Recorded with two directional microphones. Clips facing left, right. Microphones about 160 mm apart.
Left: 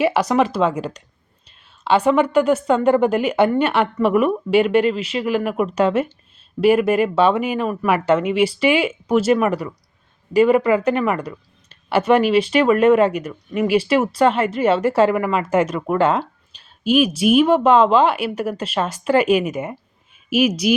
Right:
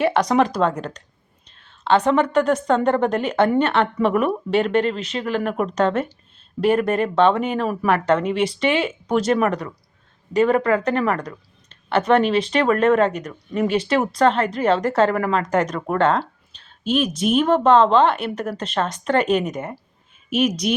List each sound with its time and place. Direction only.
0.0 s a woman's voice: 5° left (ahead or behind)
16.6 s a sound: 10° left (ahead or behind)
17.2 s speech: 10° left (ahead or behind)